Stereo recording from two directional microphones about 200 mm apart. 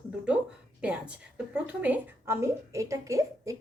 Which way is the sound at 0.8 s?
5° right (ahead or behind).